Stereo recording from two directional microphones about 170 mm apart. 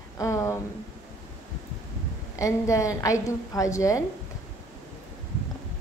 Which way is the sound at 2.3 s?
20° left (ahead or behind).